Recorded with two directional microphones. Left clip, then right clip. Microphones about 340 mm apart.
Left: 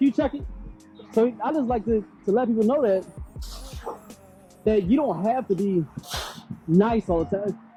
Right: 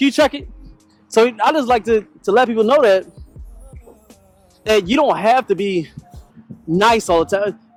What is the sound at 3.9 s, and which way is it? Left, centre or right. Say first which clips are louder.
Music: left 12 dB; centre.